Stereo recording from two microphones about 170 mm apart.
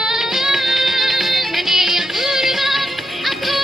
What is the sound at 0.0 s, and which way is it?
Music, 5° right (ahead or behind).